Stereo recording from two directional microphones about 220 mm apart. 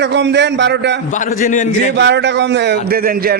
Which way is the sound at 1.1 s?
35° left (ahead or behind).